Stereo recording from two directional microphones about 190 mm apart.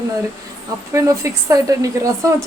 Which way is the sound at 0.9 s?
15° right (ahead or behind).